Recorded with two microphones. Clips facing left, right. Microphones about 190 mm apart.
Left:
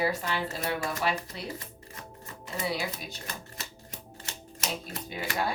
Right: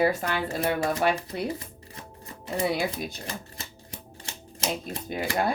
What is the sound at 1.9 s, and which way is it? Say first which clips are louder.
Music: right 2 dB; 30° right (ahead or behind).